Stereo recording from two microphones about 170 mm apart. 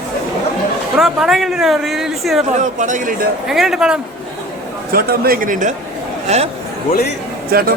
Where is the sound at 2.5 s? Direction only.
45° right (ahead or behind).